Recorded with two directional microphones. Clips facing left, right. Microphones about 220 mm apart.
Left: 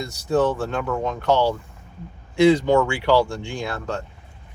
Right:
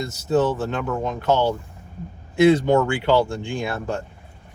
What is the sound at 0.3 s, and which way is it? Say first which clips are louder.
Speech: even; 5° right (ahead or behind).